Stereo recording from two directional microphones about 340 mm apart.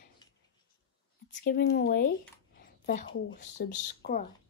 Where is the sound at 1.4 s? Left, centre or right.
Left.